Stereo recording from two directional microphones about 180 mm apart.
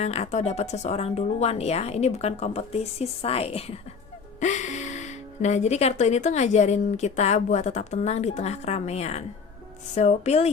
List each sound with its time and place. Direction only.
0.0 s speech: 35° left (ahead or behind)